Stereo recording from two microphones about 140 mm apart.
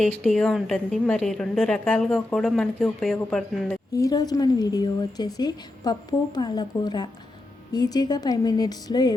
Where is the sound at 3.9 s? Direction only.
25° left (ahead or behind).